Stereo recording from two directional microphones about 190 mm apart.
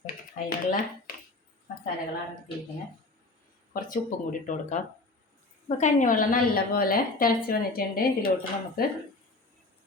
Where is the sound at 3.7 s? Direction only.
45° left (ahead or behind).